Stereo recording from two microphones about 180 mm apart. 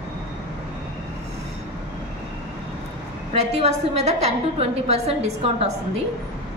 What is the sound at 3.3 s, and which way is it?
A woman's voice, 35° right (ahead or behind).